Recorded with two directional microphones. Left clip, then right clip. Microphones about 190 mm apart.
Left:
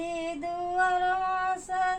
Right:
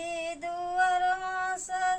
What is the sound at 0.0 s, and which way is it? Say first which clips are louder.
Female singing: left 1 dB; 20° right (ahead or behind).